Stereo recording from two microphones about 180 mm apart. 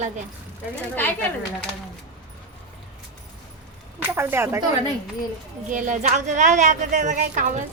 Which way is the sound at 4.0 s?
10° right (ahead or behind).